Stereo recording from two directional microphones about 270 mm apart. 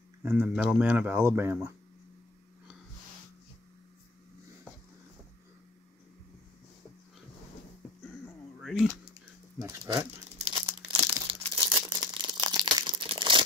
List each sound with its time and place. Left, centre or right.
0.2 s speech: centre
8.5 s a sound: centre
9.6 s speech: centre
10.7 s crumpling: right